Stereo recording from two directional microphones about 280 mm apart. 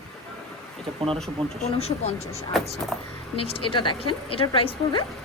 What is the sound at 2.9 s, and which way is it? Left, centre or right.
Speech, centre.